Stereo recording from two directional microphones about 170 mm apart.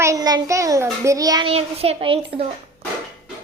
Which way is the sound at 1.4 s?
35° right (ahead or behind).